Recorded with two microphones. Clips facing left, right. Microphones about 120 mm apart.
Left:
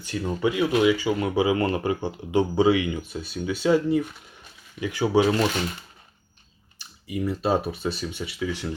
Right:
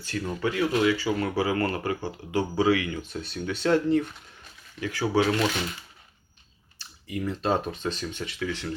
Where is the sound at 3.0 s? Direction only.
5° left (ahead or behind).